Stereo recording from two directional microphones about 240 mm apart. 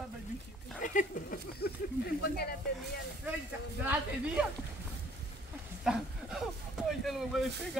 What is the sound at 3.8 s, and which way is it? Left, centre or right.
Speech, centre.